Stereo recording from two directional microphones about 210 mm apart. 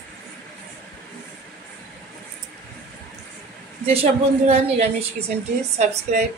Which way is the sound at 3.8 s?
30° right (ahead or behind).